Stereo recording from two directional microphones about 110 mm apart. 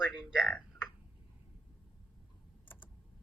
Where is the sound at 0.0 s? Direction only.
5° right (ahead or behind).